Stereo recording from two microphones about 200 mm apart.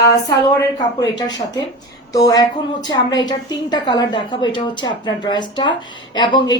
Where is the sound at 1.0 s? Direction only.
20° left (ahead or behind).